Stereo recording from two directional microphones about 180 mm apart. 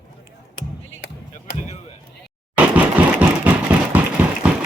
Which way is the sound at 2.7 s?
10° right (ahead or behind).